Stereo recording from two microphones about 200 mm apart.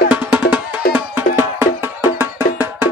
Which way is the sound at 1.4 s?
10° right (ahead or behind).